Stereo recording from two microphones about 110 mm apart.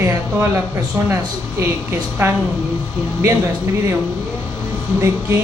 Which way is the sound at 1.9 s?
20° right (ahead or behind).